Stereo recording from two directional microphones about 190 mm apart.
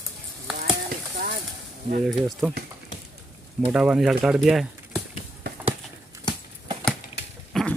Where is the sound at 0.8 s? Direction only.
50° right (ahead or behind).